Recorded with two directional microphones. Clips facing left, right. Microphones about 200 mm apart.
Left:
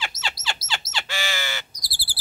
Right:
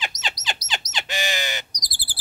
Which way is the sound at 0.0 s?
20° right (ahead or behind).